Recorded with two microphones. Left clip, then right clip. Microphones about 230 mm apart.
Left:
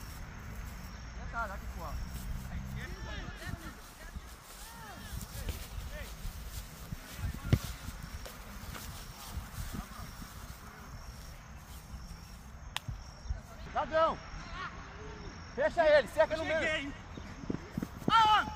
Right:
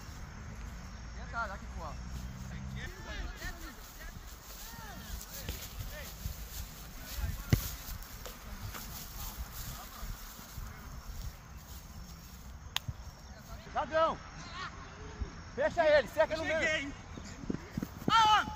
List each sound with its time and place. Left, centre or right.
1.3 s vehicle: right
5.3 s basketball bounce: right
7.4 s a sound: right
12.7 s a sound: right
13.7 s speech: centre
14.4 s a sound: right
15.5 s speech: centre
16.6 s speech: centre
18.0 s clip-clop: right